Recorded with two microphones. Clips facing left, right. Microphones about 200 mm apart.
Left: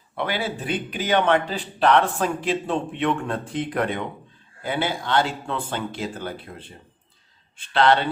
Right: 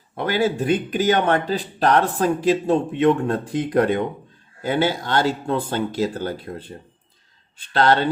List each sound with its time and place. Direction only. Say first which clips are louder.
0.2 s speech: right 6 dB; 45° right (ahead or behind)